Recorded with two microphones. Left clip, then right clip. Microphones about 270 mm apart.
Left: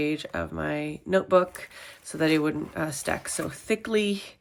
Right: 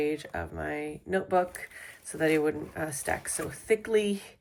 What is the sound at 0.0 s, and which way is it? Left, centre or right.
Speech, centre.